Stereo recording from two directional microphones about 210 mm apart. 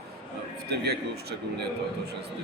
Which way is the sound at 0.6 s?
50° right (ahead or behind).